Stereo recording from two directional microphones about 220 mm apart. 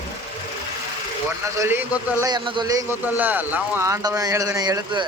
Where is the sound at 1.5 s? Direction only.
10° right (ahead or behind).